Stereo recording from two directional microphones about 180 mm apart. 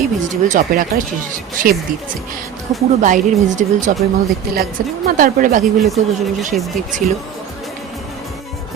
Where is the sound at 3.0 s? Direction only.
45° right (ahead or behind).